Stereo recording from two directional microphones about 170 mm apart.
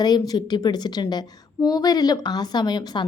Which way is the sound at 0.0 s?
25° left (ahead or behind).